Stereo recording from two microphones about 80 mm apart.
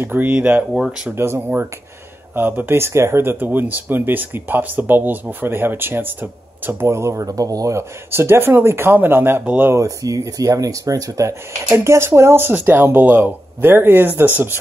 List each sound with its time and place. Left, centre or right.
0.0 s speech: right
1.1 s speech: right
8.1 s speech: right
9.4 s speech: centre
9.7 s speech: right